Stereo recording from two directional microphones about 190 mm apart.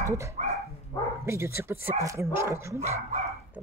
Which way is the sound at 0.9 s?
15° left (ahead or behind).